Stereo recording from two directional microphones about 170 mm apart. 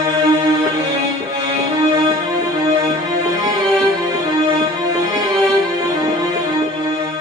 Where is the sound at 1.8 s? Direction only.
25° right (ahead or behind).